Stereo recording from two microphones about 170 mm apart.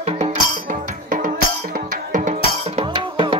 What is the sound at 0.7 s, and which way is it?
Music, 50° right (ahead or behind).